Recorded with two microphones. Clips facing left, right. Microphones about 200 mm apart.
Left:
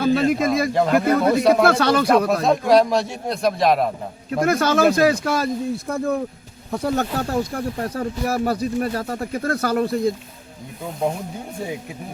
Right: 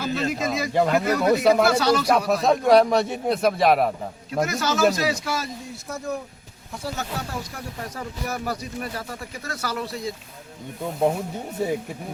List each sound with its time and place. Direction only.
0.0 s a man's voice: 55° left (ahead or behind)
0.7 s a man's voice: centre (ahead or behind)
1.6 s speech: 55° left (ahead or behind)
2.3 s a man's voice: centre (ahead or behind)
4.4 s speech: 55° left (ahead or behind)
8.3 s a man's voice: 30° left (ahead or behind)
8.9 s speech: 55° left (ahead or behind)